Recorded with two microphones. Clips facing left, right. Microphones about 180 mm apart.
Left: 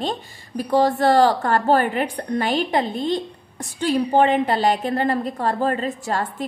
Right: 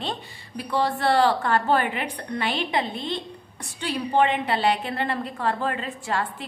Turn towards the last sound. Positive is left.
turn(degrees=40)  # may be behind; listen again after turning